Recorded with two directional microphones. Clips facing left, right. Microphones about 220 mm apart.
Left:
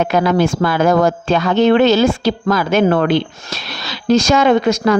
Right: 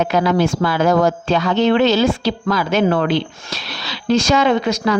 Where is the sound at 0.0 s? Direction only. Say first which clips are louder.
Left 2 dB; 50° left (ahead or behind).